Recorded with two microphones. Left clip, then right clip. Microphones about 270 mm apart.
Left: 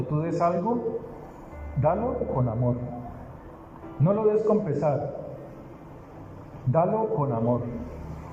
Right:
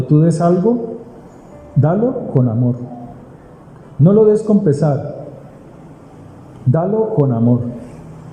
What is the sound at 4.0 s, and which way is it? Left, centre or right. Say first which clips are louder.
Speech: right 13 dB; right.